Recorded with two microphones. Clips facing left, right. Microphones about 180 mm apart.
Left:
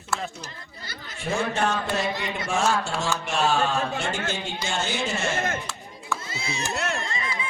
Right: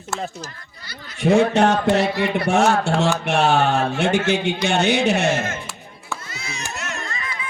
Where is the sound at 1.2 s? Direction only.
70° right (ahead or behind).